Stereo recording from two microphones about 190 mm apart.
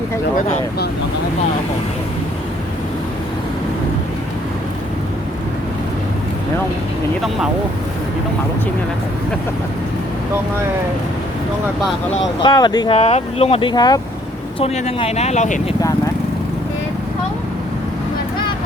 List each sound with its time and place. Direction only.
12.4 s speech: 20° left (ahead or behind)
13.0 s speech: 35° left (ahead or behind)
14.6 s speech: 30° left (ahead or behind)